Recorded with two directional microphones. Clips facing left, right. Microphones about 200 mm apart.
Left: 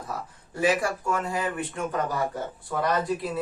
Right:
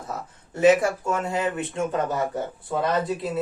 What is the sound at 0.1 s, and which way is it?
Speech, 25° right (ahead or behind).